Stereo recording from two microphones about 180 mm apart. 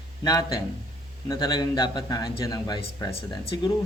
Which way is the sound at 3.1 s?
35° left (ahead or behind).